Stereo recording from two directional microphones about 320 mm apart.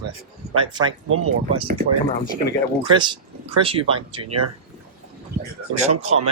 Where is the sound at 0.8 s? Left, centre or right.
Centre.